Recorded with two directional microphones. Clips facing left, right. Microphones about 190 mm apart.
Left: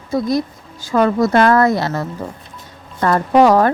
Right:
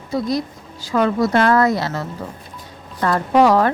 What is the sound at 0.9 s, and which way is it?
A woman's voice, 45° left (ahead or behind).